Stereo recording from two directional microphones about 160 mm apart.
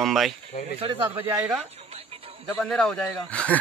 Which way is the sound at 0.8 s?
35° right (ahead or behind).